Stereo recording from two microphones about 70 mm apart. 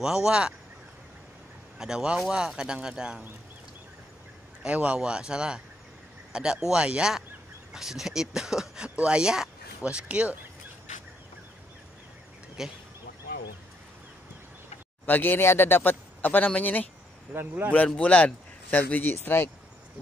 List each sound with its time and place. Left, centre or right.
0.0 s speech: centre
1.8 s speech: centre
4.6 s speech: centre
12.6 s speech: centre
15.0 s speech: left
17.3 s a man's voice: right
17.9 s speech: centre; by 19.5 s left